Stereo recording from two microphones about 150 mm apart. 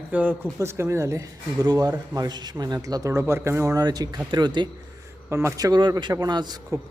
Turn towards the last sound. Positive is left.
turn(degrees=-25)  # may be behind; listen again after turning